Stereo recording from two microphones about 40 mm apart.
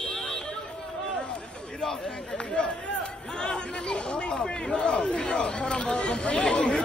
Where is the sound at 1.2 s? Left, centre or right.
Left.